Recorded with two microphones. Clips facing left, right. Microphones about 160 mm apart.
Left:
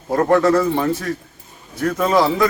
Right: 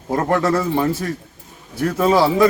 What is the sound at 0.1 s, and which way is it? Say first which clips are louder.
Speech: left 3 dB; 20° right (ahead or behind).